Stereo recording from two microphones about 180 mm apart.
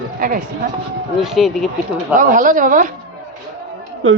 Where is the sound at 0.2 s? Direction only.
50° right (ahead or behind).